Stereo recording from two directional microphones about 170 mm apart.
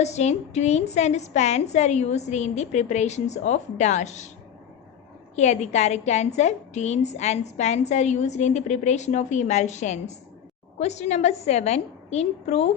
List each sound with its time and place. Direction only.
0.0 s a woman's voice: 40° left (ahead or behind)
5.4 s a woman's voice: 40° left (ahead or behind)